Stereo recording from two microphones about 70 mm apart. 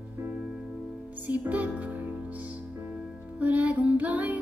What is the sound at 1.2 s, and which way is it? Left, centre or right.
Music, right.